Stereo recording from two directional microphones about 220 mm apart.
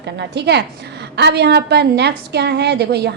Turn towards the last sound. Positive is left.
turn(degrees=-50)  # may be behind; listen again after turning